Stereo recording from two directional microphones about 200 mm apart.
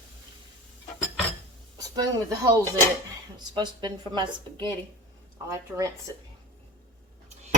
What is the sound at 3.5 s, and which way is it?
A woman's voice, 20° right (ahead or behind).